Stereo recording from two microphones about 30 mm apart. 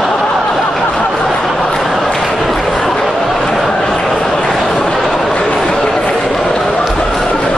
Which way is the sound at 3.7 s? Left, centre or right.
Centre.